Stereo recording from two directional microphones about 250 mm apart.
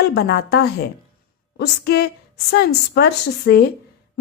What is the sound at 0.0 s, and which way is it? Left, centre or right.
A woman's voice, left.